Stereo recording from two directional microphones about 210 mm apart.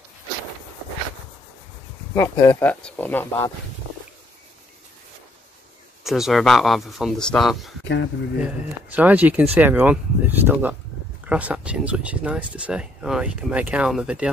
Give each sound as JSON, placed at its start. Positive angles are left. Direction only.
{"t": 2.1, "sound": "speech", "side_deg": 10}
{"t": 6.0, "sound": "speech", "side_deg": 0}
{"t": 7.8, "sound": "speech", "side_deg": 60}
{"t": 8.4, "sound": "speech", "side_deg": -5}